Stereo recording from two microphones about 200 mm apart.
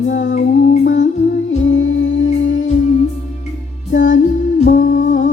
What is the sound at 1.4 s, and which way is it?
Music, 70° left (ahead or behind).